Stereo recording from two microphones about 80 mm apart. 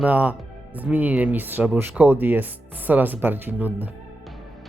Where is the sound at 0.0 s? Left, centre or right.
Centre.